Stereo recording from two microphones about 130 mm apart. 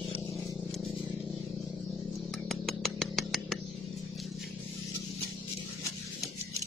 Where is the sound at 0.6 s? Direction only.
Centre (ahead or behind).